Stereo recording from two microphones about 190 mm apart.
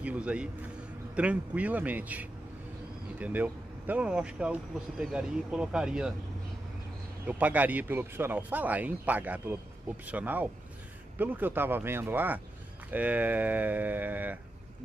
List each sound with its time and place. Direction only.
0.0 s speech: 5° right (ahead or behind)
7.2 s speech: 10° right (ahead or behind)